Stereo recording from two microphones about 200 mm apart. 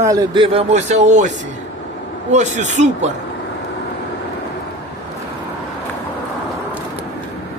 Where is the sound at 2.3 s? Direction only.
35° right (ahead or behind).